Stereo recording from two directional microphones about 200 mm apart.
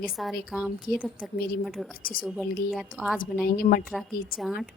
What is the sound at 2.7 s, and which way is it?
Speech, centre (ahead or behind).